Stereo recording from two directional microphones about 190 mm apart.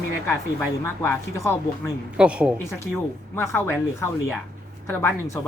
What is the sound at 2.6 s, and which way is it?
Speech, 15° left (ahead or behind).